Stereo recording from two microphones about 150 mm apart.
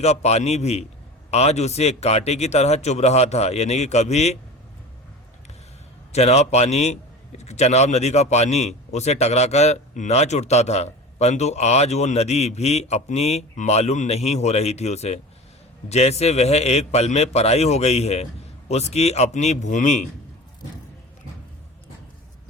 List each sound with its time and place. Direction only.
0.0 s a man's voice: 45° left (ahead or behind)
6.1 s a man's voice: 45° left (ahead or behind)